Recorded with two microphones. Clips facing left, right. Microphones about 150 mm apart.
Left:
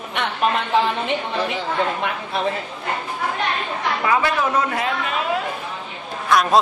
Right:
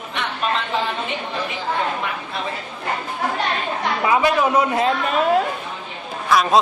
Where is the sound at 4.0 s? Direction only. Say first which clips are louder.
Right 3 dB; 20° right (ahead or behind).